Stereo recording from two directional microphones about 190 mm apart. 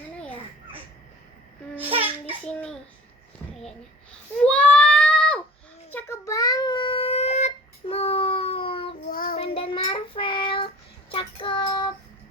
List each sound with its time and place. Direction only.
1.7 s babbling: 10° right (ahead or behind)
2.4 s a sound: 5° left (ahead or behind)
4.4 s a sound: 5° left (ahead or behind)
5.9 s child singing: 10° left (ahead or behind); by 9.0 s 30° left (ahead or behind)
9.0 s child singing: 50° left (ahead or behind)
9.4 s child singing: 30° left (ahead or behind)